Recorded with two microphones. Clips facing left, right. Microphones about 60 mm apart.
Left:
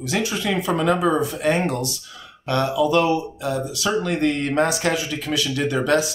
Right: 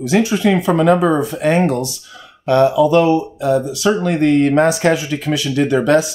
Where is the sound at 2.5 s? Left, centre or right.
Right.